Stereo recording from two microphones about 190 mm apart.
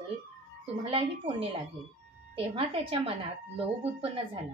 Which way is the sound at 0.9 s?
30° right (ahead or behind).